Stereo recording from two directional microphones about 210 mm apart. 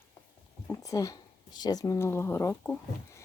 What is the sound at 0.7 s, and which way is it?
Speech, 15° left (ahead or behind).